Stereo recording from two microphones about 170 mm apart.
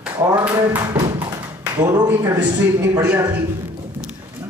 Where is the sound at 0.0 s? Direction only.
10° right (ahead or behind).